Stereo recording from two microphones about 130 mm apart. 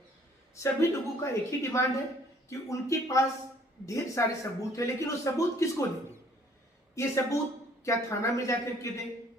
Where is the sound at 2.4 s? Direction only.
25° left (ahead or behind).